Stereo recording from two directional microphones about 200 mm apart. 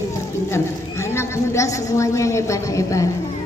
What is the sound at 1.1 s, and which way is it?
A woman's voice, 15° left (ahead or behind).